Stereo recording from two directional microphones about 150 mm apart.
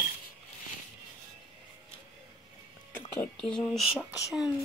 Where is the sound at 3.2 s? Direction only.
5° left (ahead or behind).